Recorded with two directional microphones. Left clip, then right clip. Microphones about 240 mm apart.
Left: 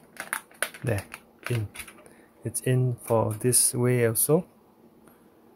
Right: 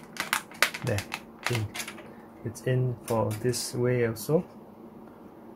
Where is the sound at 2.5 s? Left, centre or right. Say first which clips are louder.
Left 2 dB; left.